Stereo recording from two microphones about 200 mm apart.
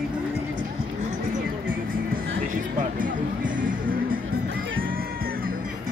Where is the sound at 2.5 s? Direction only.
40° right (ahead or behind).